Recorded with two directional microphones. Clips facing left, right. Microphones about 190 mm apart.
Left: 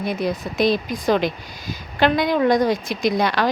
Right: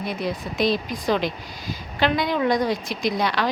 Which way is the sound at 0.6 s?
50° left (ahead or behind).